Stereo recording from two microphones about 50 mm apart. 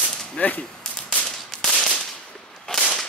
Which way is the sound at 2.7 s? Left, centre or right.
Centre.